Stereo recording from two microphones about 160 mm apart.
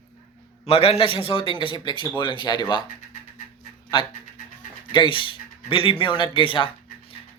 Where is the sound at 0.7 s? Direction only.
40° left (ahead or behind).